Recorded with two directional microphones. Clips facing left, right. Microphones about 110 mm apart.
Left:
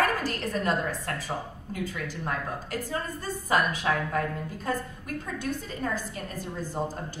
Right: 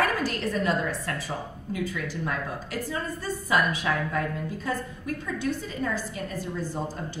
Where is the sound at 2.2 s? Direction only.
40° left (ahead or behind).